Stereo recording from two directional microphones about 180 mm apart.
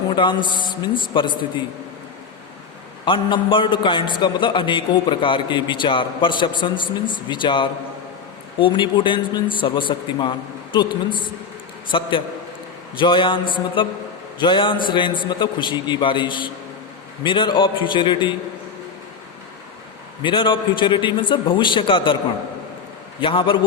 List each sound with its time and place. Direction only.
0.1 s a man's voice: 25° left (ahead or behind)
3.1 s a man's voice: 25° left (ahead or behind)
20.2 s a man's voice: 25° left (ahead or behind)
23.2 s a man's voice: 30° left (ahead or behind)